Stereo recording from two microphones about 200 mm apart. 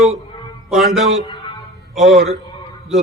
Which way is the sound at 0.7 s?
Centre (ahead or behind).